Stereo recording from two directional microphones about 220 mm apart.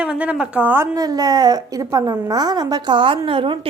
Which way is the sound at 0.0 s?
5° right (ahead or behind).